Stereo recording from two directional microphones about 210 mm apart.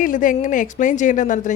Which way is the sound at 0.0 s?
40° left (ahead or behind).